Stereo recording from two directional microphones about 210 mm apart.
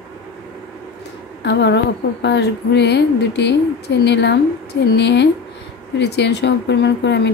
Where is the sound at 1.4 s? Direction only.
55° left (ahead or behind).